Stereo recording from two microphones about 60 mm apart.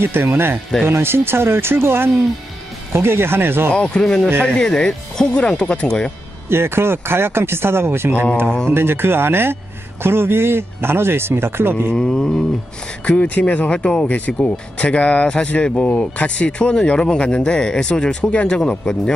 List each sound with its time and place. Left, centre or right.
0.0 s speech: right
3.8 s speech: centre
6.5 s speech: right
11.9 s speech: centre
13.0 s speech: left